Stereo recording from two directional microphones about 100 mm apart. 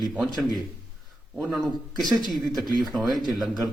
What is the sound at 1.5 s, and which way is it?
Speech, centre (ahead or behind).